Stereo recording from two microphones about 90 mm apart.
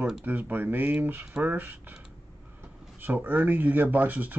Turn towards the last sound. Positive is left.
turn(degrees=-20)  # may be behind; listen again after turning